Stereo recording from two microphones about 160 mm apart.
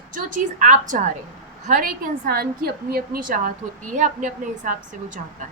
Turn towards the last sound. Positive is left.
turn(degrees=-55)  # may be behind; listen again after turning